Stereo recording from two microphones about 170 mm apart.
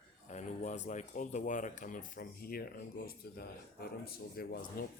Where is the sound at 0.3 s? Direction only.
45° left (ahead or behind).